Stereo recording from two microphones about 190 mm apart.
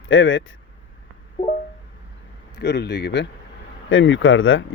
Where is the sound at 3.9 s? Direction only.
90° left.